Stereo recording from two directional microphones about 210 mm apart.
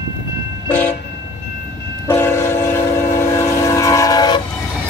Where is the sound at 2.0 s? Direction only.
10° left (ahead or behind).